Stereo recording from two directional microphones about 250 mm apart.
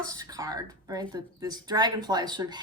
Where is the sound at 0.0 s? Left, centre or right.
Centre.